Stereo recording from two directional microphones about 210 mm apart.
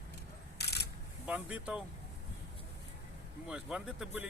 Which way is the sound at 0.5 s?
50° left (ahead or behind).